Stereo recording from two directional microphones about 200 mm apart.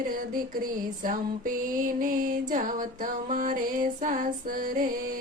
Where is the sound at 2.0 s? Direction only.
40° right (ahead or behind).